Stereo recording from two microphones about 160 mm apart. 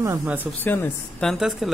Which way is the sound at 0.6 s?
10° left (ahead or behind).